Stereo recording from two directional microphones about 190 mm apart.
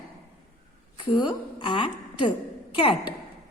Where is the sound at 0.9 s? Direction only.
25° left (ahead or behind).